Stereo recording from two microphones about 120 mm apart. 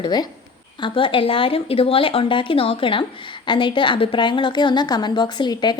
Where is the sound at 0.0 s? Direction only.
35° left (ahead or behind).